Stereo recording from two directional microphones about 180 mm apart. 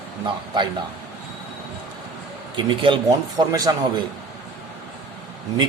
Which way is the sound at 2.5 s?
25° right (ahead or behind).